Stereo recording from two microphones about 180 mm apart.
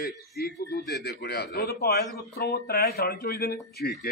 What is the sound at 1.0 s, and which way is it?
A man's voice, 65° left (ahead or behind).